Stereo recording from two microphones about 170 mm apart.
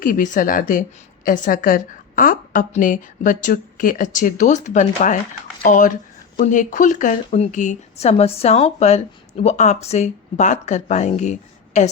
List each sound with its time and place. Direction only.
0.0 s a woman's voice: 50° left (ahead or behind)